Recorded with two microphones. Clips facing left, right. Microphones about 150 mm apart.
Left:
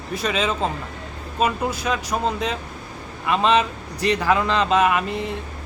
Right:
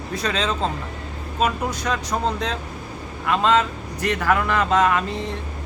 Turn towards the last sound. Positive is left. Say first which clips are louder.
# even
turn(degrees=15)  # may be behind; listen again after turning